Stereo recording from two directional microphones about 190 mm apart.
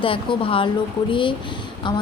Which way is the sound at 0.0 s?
30° left (ahead or behind).